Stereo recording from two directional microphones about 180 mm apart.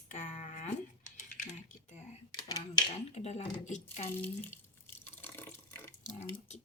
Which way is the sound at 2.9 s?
35° left (ahead or behind).